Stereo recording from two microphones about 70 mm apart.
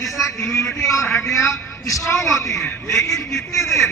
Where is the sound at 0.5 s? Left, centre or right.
Left.